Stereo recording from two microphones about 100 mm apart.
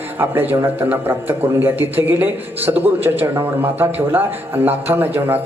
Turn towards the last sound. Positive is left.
turn(degrees=-20)  # may be behind; listen again after turning